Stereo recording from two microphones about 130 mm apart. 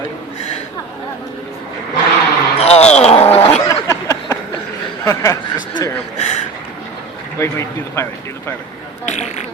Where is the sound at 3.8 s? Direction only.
25° left (ahead or behind).